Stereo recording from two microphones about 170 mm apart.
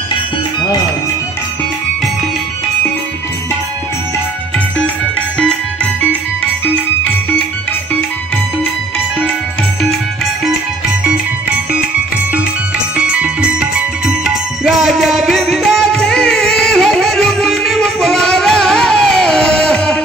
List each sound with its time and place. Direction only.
12.9 s music: 5° right (ahead or behind)